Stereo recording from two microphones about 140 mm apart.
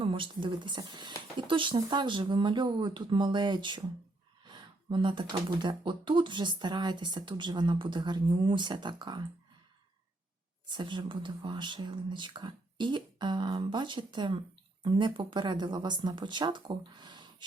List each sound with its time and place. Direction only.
0.0 s speech: 40° right (ahead or behind)
10.7 s speech: 35° right (ahead or behind)